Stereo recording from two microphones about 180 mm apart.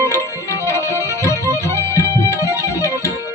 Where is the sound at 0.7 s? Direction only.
15° left (ahead or behind).